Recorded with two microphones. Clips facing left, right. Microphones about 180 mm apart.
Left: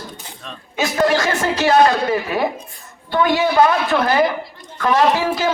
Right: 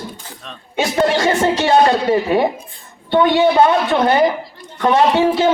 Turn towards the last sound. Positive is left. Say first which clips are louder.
# right 3 dB
turn(degrees=-25)  # may be behind; listen again after turning